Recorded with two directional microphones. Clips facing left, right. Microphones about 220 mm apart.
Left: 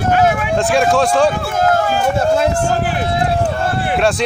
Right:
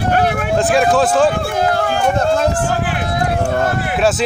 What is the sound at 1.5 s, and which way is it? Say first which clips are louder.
Run: left 2 dB; 45° left (ahead or behind).